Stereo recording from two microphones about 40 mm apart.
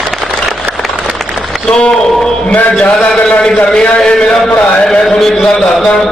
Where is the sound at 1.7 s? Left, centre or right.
Centre.